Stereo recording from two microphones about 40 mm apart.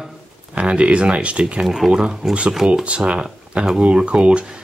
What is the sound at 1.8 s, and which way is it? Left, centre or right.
Speech, centre.